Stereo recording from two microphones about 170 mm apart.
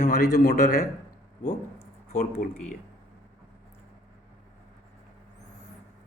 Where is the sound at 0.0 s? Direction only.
45° left (ahead or behind).